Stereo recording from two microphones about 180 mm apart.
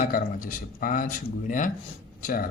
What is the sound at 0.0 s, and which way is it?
Speech, 50° left (ahead or behind).